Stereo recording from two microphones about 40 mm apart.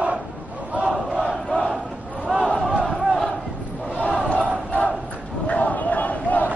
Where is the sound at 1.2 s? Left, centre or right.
Left.